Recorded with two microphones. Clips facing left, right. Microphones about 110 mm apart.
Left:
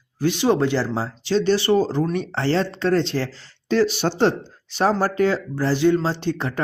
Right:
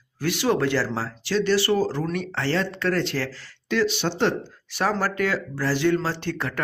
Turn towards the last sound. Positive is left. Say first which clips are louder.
# left 4 dB
turn(degrees=20)  # may be behind; listen again after turning